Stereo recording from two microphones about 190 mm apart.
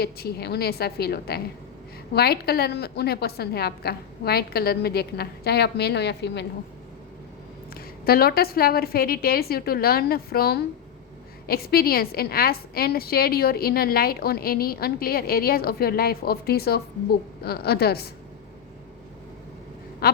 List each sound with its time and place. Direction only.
0.0 s a woman's voice: 55° left (ahead or behind)
7.7 s a woman's voice: 55° left (ahead or behind)
20.0 s quack: 55° left (ahead or behind)